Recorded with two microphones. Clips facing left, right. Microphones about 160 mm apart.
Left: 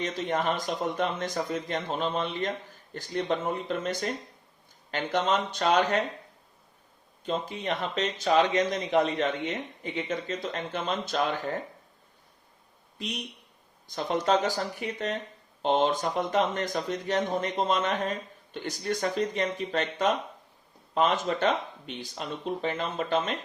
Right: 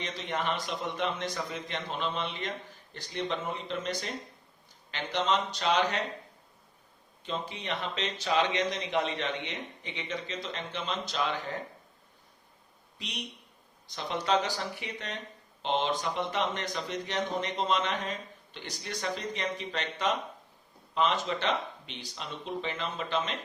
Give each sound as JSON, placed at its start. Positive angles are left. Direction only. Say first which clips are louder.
{"t": 0.0, "sound": "speech", "louder": "left 5 dB", "side_deg": 45}
{"t": 7.3, "sound": "speech", "louder": "left 5 dB", "side_deg": 45}
{"t": 13.9, "sound": "speech", "louder": "left 4 dB", "side_deg": 45}